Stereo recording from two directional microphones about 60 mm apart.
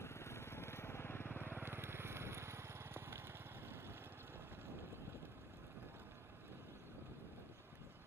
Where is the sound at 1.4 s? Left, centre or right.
Right.